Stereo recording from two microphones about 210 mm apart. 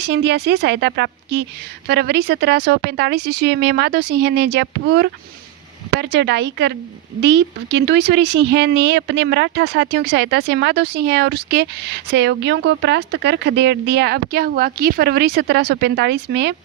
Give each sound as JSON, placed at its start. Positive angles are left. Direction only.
{"t": 0.0, "sound": "speech", "side_deg": -55}